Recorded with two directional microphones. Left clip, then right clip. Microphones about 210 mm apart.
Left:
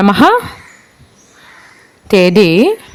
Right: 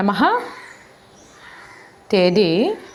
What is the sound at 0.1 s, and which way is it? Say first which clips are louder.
Speech: left 8 dB; 60° left (ahead or behind).